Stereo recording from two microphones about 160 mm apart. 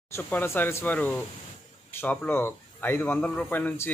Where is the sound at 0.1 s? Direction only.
15° left (ahead or behind).